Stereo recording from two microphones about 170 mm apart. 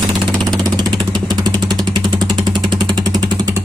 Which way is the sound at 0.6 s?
25° right (ahead or behind).